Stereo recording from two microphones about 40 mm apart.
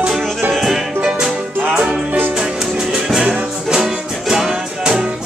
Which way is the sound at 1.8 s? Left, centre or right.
Right.